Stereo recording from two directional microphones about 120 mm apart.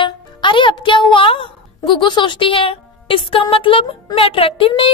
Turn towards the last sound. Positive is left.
turn(degrees=45)  # may be behind; listen again after turning